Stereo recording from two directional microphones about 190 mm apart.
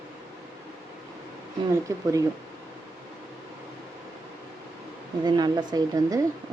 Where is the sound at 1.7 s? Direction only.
15° right (ahead or behind).